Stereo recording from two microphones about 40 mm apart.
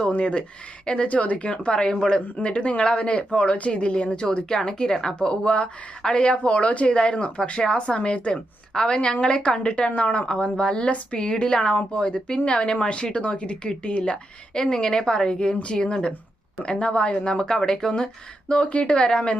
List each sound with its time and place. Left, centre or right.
0.1 s speech: left